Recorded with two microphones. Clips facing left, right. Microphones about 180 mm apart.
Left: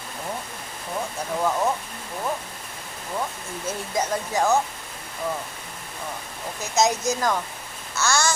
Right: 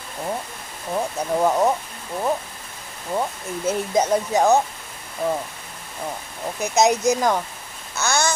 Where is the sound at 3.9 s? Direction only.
20° right (ahead or behind).